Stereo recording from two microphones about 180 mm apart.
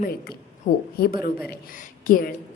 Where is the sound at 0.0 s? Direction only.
55° left (ahead or behind).